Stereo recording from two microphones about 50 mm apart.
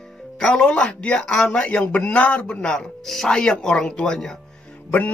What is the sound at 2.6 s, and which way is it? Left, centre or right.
Speech, centre.